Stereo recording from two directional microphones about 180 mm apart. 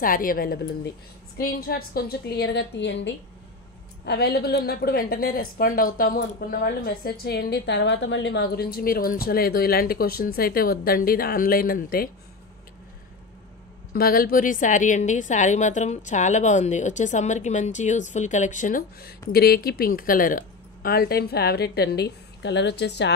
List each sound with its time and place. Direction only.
0.0 s a woman's voice: 50° left (ahead or behind)
13.9 s a woman's voice: 55° left (ahead or behind); by 23.1 s 75° left (ahead or behind)